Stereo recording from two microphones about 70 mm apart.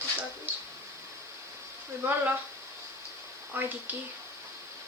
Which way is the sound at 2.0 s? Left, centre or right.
Right.